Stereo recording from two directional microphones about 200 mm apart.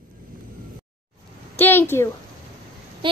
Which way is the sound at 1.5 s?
10° left (ahead or behind).